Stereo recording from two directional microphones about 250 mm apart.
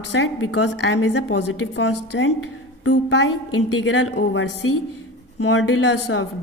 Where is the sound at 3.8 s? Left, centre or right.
Left.